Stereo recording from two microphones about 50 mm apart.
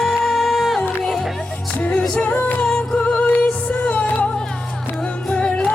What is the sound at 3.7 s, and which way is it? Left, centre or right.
Music, left.